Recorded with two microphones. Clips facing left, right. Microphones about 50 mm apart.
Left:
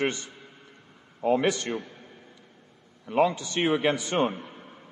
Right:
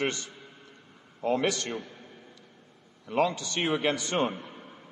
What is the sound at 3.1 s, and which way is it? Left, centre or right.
A man's voice, centre.